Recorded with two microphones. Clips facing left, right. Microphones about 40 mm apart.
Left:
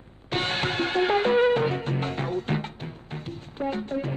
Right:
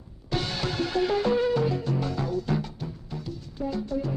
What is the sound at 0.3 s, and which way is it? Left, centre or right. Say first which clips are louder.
Music: left 3 dB; left.